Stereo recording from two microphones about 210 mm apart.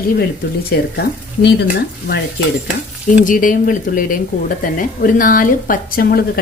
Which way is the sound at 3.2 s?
40° left (ahead or behind).